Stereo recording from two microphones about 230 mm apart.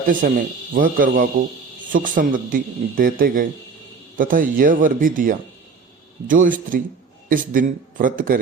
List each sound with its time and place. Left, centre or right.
0.1 s a man's voice: right